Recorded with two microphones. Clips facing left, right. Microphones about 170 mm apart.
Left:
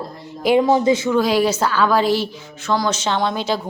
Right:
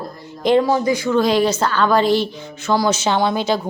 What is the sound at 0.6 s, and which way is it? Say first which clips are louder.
Speech: left 2 dB; 20° left (ahead or behind).